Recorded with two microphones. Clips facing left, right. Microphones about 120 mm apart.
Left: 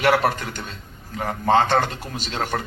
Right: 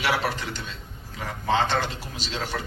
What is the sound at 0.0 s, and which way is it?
A man's voice, 50° left (ahead or behind).